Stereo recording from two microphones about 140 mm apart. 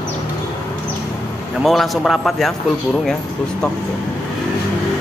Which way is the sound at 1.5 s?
Centre (ahead or behind).